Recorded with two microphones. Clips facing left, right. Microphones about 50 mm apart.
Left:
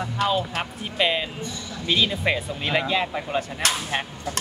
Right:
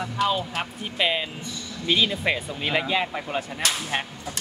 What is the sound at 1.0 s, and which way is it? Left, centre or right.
Speech, centre.